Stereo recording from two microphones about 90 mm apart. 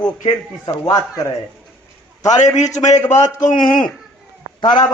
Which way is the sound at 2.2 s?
40° left (ahead or behind).